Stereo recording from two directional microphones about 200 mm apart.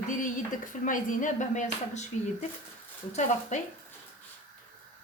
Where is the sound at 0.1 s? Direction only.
40° left (ahead or behind).